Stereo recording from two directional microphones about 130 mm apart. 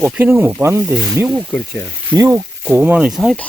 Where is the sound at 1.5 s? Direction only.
10° left (ahead or behind).